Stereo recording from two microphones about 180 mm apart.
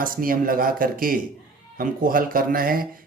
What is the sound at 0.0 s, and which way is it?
Speech, 50° right (ahead or behind).